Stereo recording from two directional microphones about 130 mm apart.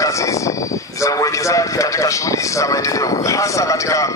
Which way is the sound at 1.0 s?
25° left (ahead or behind).